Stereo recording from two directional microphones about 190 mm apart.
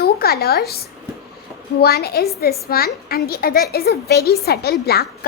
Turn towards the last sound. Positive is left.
turn(degrees=55)  # may be behind; listen again after turning